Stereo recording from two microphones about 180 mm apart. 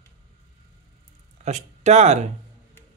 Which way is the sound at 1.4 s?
40° right (ahead or behind).